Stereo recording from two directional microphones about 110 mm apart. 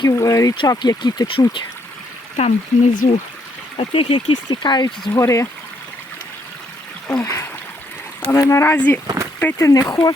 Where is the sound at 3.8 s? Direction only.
60° left (ahead or behind).